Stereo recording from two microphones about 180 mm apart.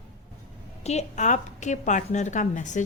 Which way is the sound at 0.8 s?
40° left (ahead or behind).